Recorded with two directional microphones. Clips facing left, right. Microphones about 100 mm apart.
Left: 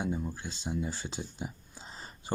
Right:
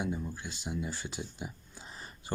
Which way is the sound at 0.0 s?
30° left (ahead or behind).